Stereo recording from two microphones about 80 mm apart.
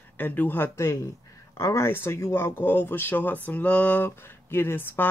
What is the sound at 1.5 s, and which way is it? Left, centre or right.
Speech, left.